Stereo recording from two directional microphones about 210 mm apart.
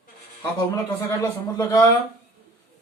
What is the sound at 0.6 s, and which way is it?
Speech, 15° left (ahead or behind).